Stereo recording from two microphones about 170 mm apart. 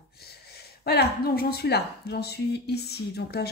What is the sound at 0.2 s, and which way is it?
Speech, 70° left (ahead or behind).